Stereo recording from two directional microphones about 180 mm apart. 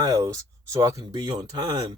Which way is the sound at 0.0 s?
20° right (ahead or behind).